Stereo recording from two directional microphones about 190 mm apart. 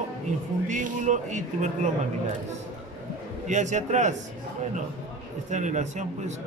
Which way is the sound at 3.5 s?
40° right (ahead or behind).